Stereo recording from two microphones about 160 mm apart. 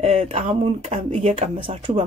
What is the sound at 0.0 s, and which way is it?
Speech, 40° right (ahead or behind).